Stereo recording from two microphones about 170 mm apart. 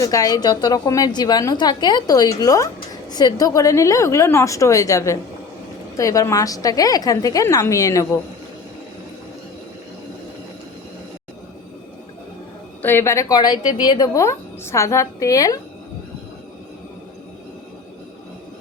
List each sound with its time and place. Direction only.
0.0 s a woman's voice: 20° left (ahead or behind)
12.8 s a woman's voice: 15° left (ahead or behind)